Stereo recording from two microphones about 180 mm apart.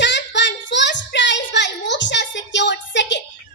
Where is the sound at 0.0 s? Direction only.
80° left.